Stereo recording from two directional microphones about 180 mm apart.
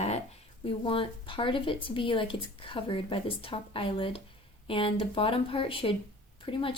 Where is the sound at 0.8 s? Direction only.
30° left (ahead or behind).